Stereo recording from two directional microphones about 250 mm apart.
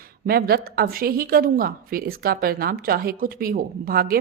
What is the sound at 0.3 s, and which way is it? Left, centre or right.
A woman's voice, right.